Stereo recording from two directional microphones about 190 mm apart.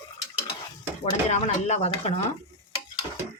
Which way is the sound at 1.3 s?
35° left (ahead or behind).